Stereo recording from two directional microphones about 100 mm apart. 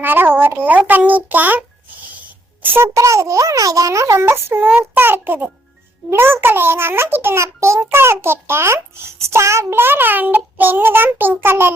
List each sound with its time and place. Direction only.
0.0 s a child's voice: 20° right (ahead or behind)